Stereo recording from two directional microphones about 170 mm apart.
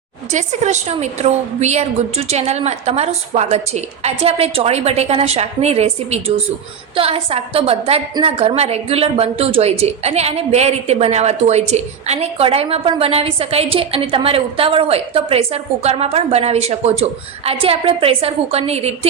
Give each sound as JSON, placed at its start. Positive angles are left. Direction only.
{"t": 0.3, "sound": "a woman's voice", "side_deg": -45}